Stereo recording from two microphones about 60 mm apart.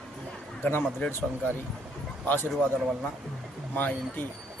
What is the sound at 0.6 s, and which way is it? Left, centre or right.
Speech, left.